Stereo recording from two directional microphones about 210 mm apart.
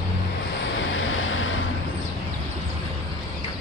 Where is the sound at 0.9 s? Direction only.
65° left (ahead or behind).